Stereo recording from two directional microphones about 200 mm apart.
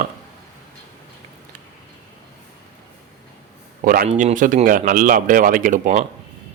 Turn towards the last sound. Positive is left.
turn(degrees=-40)  # may be behind; listen again after turning